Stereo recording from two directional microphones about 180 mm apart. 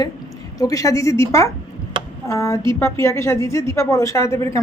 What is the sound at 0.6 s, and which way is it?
A woman's voice, 20° left (ahead or behind).